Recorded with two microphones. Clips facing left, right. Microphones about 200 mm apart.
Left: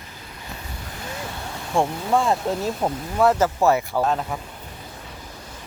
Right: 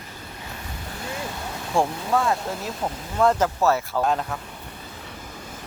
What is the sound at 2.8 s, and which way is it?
Speech, 25° left (ahead or behind).